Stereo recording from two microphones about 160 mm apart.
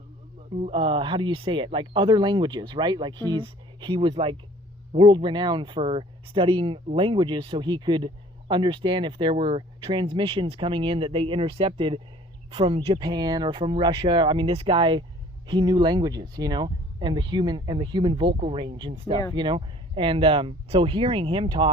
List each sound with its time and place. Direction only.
0.5 s speech: 35° right (ahead or behind)